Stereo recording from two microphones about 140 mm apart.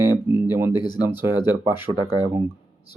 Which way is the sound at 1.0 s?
15° right (ahead or behind).